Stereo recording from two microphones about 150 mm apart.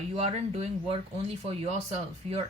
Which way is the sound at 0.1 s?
40° right (ahead or behind).